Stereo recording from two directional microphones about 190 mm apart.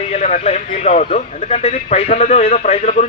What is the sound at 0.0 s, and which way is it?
A man's voice, 35° left (ahead or behind).